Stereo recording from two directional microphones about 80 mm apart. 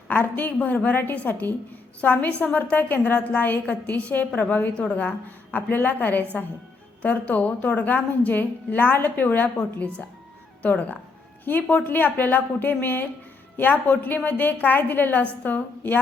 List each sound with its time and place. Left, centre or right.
0.1 s a woman's voice: left